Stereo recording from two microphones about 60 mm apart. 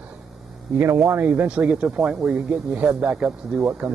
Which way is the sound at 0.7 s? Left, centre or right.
Right.